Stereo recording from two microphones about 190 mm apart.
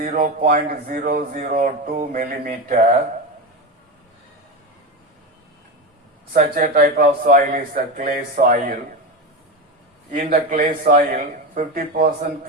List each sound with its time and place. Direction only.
0.0 s speech: 45° right (ahead or behind)
6.3 s speech: 45° right (ahead or behind)
10.1 s speech: 45° right (ahead or behind)